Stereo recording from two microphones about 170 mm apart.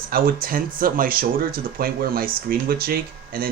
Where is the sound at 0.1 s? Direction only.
60° right (ahead or behind).